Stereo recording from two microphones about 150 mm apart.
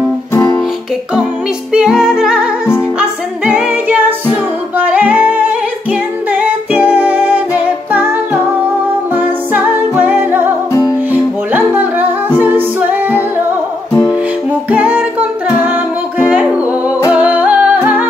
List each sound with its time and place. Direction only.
0.3 s music: 25° left (ahead or behind)
1.7 s music: 5° right (ahead or behind)
3.0 s a capella: 5° right (ahead or behind)
4.7 s music: 10° right (ahead or behind)
9.1 s music: 10° right (ahead or behind)
14.5 s music: 10° right (ahead or behind)